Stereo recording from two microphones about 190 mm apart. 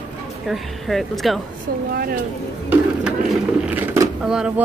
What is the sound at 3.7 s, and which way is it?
Speech, 10° right (ahead or behind).